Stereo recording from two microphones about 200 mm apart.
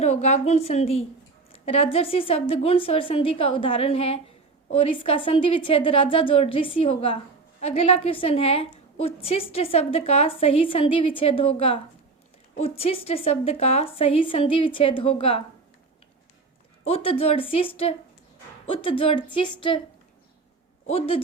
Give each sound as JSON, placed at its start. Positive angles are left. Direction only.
{"t": 0.0, "sound": "a woman's voice", "side_deg": 35}
{"t": 16.8, "sound": "a woman's voice", "side_deg": 30}
{"t": 20.8, "sound": "a woman's voice", "side_deg": 30}